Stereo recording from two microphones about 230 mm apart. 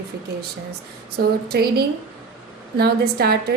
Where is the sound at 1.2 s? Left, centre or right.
Right.